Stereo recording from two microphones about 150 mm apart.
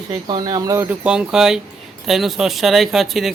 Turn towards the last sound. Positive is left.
turn(degrees=0)  # may be behind; listen again after turning